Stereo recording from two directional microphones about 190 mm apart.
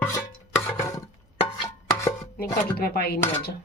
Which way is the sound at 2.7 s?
55° left (ahead or behind).